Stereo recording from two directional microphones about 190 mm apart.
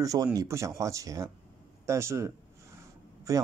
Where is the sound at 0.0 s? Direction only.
20° right (ahead or behind).